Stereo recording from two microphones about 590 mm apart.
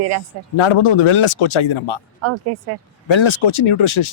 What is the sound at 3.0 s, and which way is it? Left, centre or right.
Speech, left.